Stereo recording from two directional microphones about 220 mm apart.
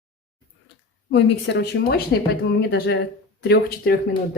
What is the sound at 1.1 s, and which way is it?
Speech, 55° left (ahead or behind).